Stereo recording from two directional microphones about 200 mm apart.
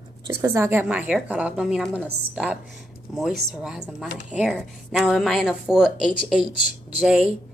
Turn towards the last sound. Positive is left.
turn(degrees=-5)  # may be behind; listen again after turning